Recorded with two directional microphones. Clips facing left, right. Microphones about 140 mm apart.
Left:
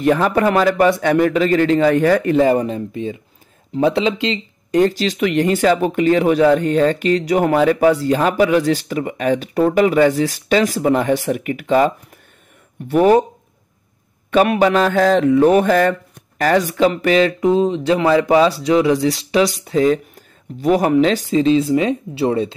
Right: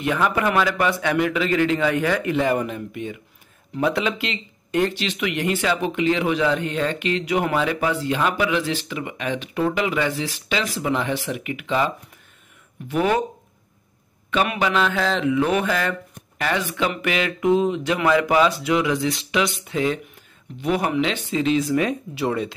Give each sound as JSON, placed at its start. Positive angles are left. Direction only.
{"t": 0.0, "sound": "speech", "side_deg": 35}
{"t": 12.9, "sound": "speech", "side_deg": 40}
{"t": 14.3, "sound": "speech", "side_deg": 40}